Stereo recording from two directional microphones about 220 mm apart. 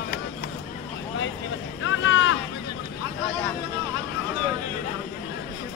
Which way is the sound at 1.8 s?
60° left (ahead or behind).